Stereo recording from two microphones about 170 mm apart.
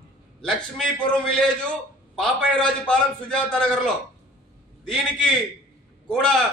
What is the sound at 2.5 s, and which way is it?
A man's voice, 5° left (ahead or behind).